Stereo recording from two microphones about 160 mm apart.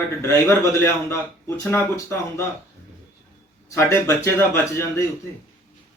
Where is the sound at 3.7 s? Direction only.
15° left (ahead or behind).